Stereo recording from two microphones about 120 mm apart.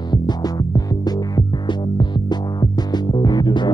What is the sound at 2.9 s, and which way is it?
Music, 35° left (ahead or behind).